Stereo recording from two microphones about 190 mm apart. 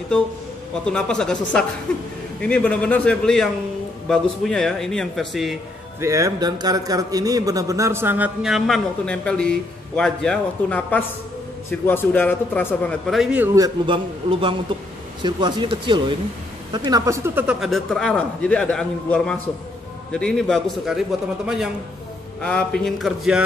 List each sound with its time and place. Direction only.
0.8 s speech: 5° left (ahead or behind)
2.4 s speech: 5° left (ahead or behind)
5.9 s speech: 15° right (ahead or behind)
13.6 s speech: 25° right (ahead or behind); by 21.0 s centre (ahead or behind)
22.4 s speech: 5° left (ahead or behind)